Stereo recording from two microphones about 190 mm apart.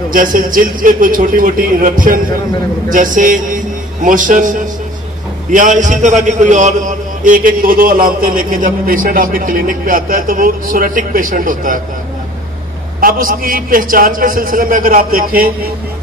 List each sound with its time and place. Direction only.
0.1 s a man's voice: 45° right (ahead or behind)
13.0 s a man's voice: 50° right (ahead or behind)